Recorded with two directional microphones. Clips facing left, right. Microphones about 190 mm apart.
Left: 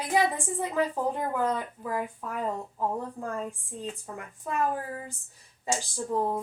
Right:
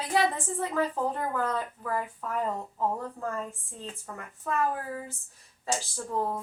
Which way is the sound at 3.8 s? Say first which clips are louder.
Left 3 dB; 15° left (ahead or behind).